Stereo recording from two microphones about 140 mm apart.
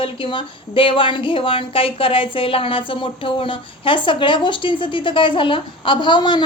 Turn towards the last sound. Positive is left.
turn(degrees=35)  # may be behind; listen again after turning